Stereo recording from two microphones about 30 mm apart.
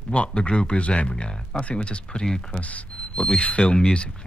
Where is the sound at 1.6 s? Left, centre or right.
Left.